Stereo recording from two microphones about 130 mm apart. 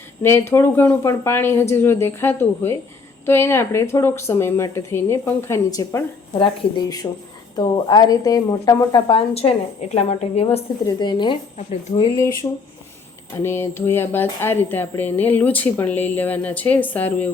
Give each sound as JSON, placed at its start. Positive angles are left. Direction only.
{"t": 0.2, "sound": "speech", "side_deg": 20}
{"t": 10.8, "sound": "speech", "side_deg": 35}
{"t": 11.5, "sound": "speech", "side_deg": 65}
{"t": 12.1, "sound": "speech", "side_deg": 25}